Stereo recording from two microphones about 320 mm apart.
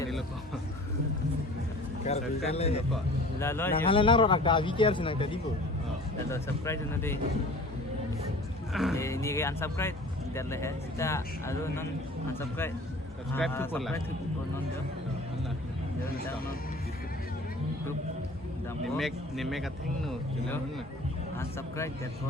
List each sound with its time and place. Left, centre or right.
2.0 s speech: centre
2.9 s speech: centre
8.7 s speech: centre
18.9 s speech: centre